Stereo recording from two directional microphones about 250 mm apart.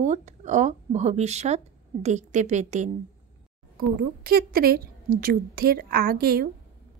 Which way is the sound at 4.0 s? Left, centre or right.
Right.